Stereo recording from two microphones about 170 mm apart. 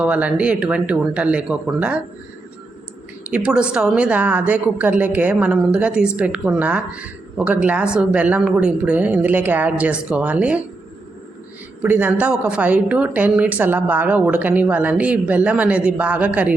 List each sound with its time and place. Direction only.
0.0 s a woman's voice: 5° right (ahead or behind)
3.2 s a woman's voice: 5° right (ahead or behind)
11.8 s a woman's voice: 10° right (ahead or behind)